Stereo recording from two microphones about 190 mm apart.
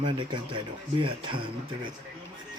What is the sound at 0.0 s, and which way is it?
Speech, 25° right (ahead or behind).